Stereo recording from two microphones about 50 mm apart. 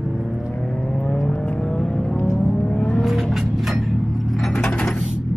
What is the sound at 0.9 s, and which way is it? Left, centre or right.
Vehicle, centre.